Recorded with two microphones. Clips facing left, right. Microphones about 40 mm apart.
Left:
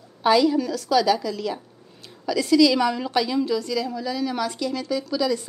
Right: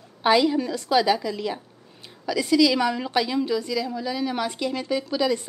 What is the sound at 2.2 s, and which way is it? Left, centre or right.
A woman's voice, centre.